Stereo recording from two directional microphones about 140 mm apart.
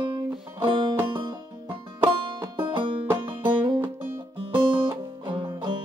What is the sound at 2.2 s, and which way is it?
Banjo, 35° right (ahead or behind).